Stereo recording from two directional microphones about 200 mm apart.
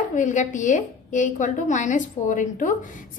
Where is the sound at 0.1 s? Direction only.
40° left (ahead or behind).